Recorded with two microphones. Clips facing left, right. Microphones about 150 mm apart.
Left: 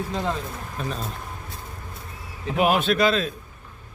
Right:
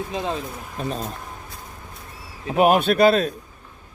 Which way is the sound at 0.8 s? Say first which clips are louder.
Right 3 dB; 40° right (ahead or behind).